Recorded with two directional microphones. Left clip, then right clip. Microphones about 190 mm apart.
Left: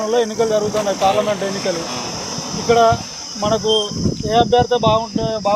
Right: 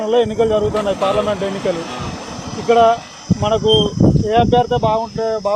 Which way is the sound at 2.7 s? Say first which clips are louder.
Right 1 dB; 35° right (ahead or behind).